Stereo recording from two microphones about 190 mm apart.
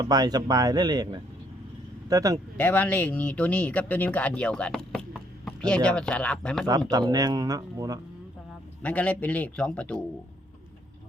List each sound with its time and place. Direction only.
0.0 s a man's voice: 20° right (ahead or behind)
2.6 s speech: 10° left (ahead or behind)
6.9 s a man's voice: 20° right (ahead or behind)
8.8 s speech: 5° left (ahead or behind)